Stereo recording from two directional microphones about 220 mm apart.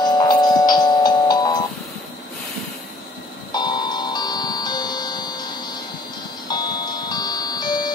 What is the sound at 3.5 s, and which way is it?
Tick-tock, 20° left (ahead or behind).